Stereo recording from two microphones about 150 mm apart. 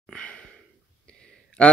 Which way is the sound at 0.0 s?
5° left (ahead or behind).